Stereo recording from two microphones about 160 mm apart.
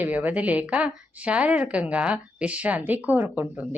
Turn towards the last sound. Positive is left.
turn(degrees=-10)  # may be behind; listen again after turning